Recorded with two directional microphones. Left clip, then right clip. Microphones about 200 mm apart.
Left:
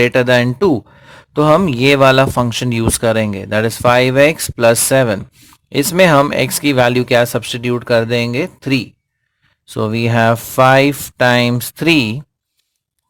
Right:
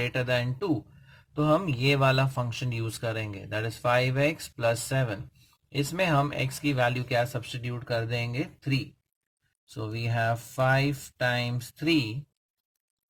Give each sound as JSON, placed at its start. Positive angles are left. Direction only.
{"t": 0.0, "sound": "speech", "side_deg": 45}